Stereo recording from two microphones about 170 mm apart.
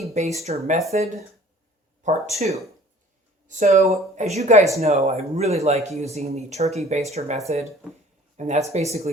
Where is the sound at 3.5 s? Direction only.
45° right (ahead or behind).